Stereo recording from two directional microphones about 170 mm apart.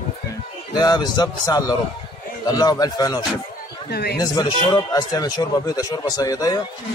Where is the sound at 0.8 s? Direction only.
25° left (ahead or behind).